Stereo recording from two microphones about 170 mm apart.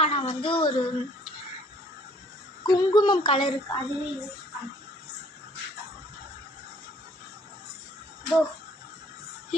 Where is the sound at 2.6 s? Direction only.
25° left (ahead or behind).